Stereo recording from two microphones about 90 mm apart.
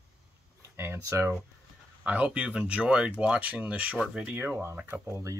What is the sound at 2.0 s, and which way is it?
Speech, 15° right (ahead or behind).